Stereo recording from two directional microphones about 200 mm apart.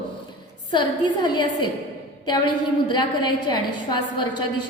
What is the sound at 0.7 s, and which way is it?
A woman's voice, 20° left (ahead or behind).